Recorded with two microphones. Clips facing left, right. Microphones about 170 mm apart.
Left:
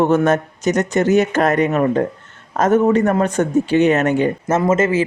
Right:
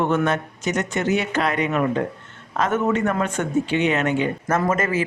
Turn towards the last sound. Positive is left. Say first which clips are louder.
# left 6 dB
turn(degrees=25)  # may be behind; listen again after turning